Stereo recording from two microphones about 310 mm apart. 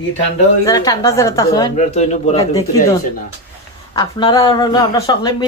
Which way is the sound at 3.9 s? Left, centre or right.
Centre.